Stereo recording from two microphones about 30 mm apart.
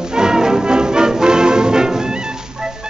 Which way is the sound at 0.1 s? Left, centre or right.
Right.